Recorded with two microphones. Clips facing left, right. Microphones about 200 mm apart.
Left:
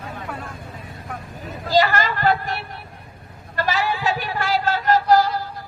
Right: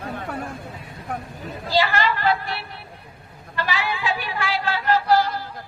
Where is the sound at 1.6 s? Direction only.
45° left (ahead or behind).